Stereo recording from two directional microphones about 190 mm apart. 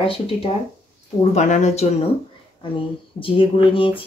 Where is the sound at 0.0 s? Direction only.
30° left (ahead or behind).